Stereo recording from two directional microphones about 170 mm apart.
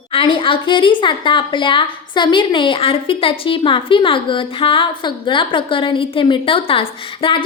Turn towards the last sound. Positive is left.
turn(degrees=30)  # may be behind; listen again after turning